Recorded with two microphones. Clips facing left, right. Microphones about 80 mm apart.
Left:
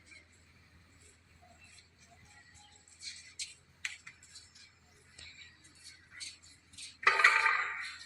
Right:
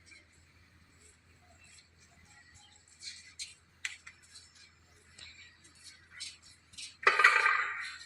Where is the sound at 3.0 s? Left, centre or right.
Right.